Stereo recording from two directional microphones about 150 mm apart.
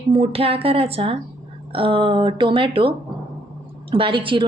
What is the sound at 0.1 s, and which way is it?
A woman's voice, 40° right (ahead or behind).